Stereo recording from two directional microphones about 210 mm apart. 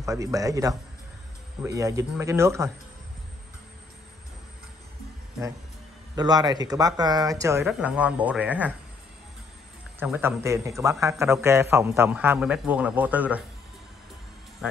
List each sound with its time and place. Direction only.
0.0 s a man's voice: 15° right (ahead or behind)
6.1 s a man's voice: 20° right (ahead or behind)
9.9 s a man's voice: 10° right (ahead or behind)